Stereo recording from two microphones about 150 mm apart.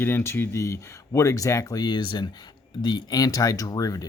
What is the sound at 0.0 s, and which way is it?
Speech, 15° left (ahead or behind).